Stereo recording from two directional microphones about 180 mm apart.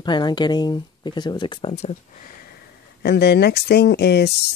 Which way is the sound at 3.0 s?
65° left (ahead or behind).